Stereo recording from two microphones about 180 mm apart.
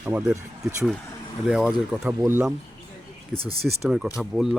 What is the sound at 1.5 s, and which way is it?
Speech, 5° right (ahead or behind).